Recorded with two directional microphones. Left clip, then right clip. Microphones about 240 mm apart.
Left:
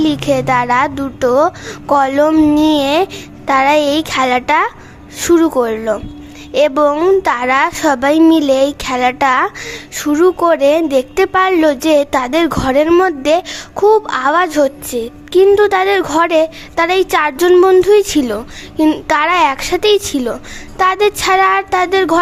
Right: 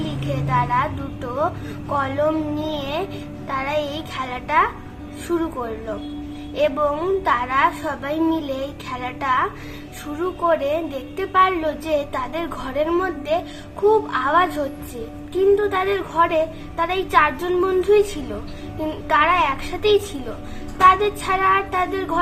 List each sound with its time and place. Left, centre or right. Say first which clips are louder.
0.0 s a woman's voice: left 14 dB; left